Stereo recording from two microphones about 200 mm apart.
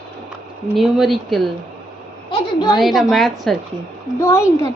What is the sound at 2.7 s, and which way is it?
Speech, centre (ahead or behind).